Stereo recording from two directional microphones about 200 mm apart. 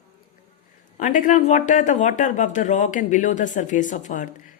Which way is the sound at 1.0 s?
40° left (ahead or behind).